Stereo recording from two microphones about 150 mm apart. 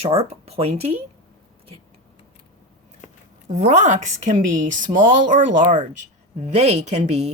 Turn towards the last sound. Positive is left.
turn(degrees=-45)  # may be behind; listen again after turning